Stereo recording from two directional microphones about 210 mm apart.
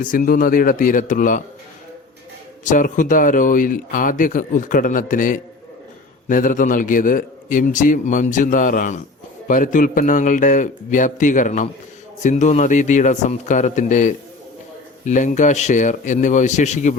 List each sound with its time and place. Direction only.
0.0 s speech: 40° left (ahead or behind)
2.6 s speech: 40° left (ahead or behind)